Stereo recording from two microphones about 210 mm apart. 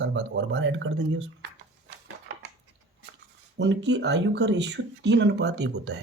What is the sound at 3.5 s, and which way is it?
Speech, 55° right (ahead or behind).